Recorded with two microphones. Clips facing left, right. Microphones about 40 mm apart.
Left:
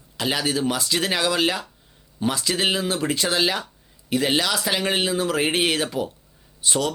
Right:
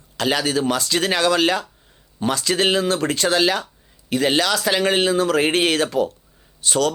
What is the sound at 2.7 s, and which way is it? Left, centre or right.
Speech, right.